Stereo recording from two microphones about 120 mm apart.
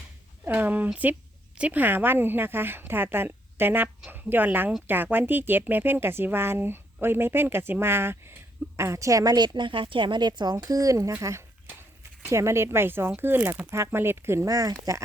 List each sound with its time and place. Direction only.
0.4 s a woman's voice: 15° right (ahead or behind)